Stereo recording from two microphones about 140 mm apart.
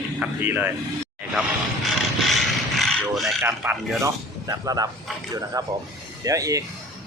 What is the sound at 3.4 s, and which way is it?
Speech, 15° right (ahead or behind).